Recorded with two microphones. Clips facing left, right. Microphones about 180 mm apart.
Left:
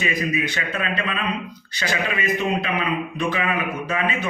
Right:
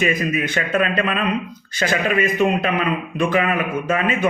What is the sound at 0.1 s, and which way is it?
Speech, 50° right (ahead or behind).